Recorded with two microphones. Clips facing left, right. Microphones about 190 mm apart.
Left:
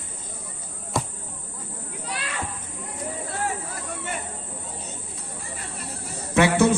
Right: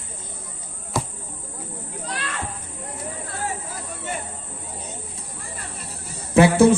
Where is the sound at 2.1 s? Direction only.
10° left (ahead or behind).